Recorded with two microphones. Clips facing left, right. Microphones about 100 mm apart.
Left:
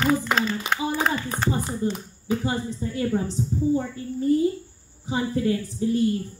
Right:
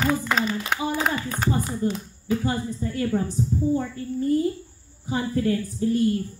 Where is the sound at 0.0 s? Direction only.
5° right (ahead or behind).